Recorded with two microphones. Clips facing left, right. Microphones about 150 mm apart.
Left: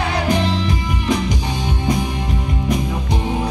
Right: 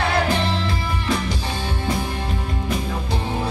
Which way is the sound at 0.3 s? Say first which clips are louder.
Left 4 dB; 15° left (ahead or behind).